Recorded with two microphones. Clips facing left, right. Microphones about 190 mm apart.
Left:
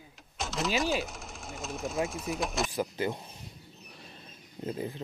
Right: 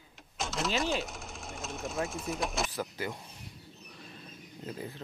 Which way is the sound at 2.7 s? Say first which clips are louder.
Left 5 dB; 20° left (ahead or behind).